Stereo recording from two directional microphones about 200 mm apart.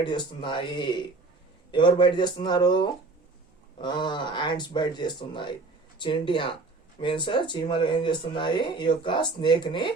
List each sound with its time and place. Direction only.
0.0 s speech: 20° left (ahead or behind)